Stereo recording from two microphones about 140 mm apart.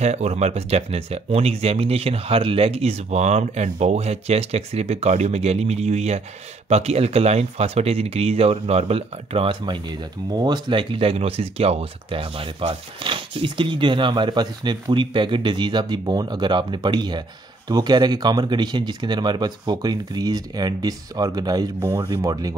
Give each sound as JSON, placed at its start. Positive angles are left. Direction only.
{"t": 0.0, "sound": "speech", "side_deg": -50}